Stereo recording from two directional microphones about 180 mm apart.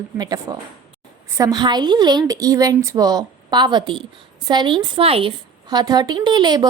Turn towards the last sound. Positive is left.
turn(degrees=-25)  # may be behind; listen again after turning